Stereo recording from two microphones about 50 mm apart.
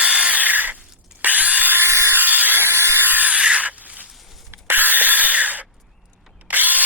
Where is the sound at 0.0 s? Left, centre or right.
Right.